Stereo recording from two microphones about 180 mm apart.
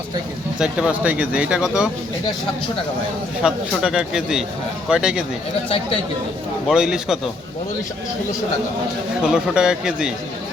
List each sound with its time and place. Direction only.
0.6 s speech: 5° right (ahead or behind)
3.4 s speech: 5° right (ahead or behind)
5.6 s speech: 30° left (ahead or behind)
6.7 s speech: 5° right (ahead or behind)
9.2 s speech: 5° right (ahead or behind)